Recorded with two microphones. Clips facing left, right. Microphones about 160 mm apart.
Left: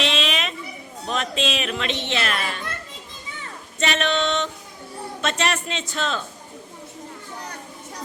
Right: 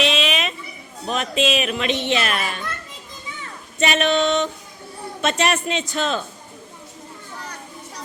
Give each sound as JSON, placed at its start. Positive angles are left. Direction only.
{"t": 0.0, "sound": "a sound", "side_deg": -5}
{"t": 1.0, "sound": "speech", "side_deg": -5}
{"t": 3.8, "sound": "speech", "side_deg": -10}